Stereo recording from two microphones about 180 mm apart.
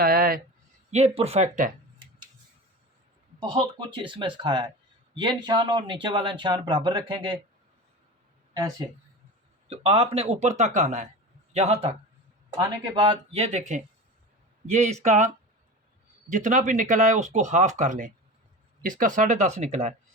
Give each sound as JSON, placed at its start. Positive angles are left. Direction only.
{"t": 0.0, "sound": "a sound", "side_deg": -55}
{"t": 0.9, "sound": "speech", "side_deg": -40}
{"t": 3.4, "sound": "speech", "side_deg": -25}
{"t": 9.6, "sound": "speech", "side_deg": -35}
{"t": 12.5, "sound": "speech", "side_deg": -20}
{"t": 16.3, "sound": "speech", "side_deg": -45}